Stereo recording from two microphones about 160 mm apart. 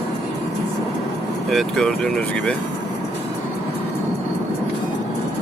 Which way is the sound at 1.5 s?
Centre (ahead or behind).